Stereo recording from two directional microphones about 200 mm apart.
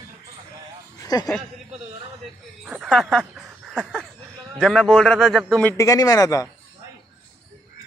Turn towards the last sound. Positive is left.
turn(degrees=15)  # may be behind; listen again after turning